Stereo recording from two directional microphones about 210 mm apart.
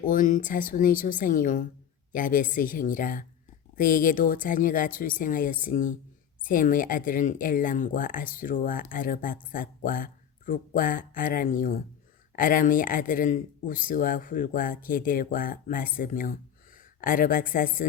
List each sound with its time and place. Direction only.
0.0 s speech: 40° left (ahead or behind)